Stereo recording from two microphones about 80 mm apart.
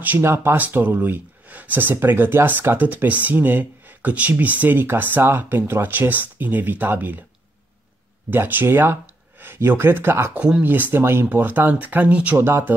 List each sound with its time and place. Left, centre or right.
0.0 s speech: right
8.3 s speech: right
10.3 s speech: centre
12.4 s speech: right